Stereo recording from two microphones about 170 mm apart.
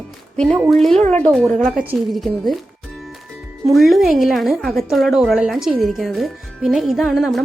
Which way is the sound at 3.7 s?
Centre (ahead or behind).